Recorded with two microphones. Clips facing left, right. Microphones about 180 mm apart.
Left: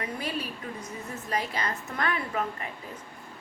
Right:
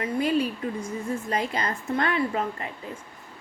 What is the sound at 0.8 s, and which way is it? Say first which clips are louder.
A woman's voice: right 8 dB; 30° right (ahead or behind).